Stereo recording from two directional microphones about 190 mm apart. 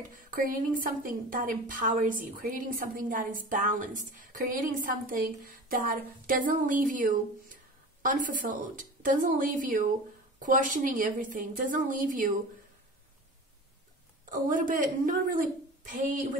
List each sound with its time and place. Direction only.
0.1 s a woman's voice: 45° right (ahead or behind)
14.3 s a woman's voice: 45° right (ahead or behind)